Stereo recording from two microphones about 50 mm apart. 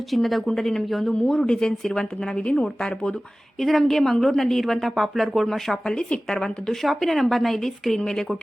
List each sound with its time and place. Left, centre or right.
0.1 s speech: centre
3.6 s speech: centre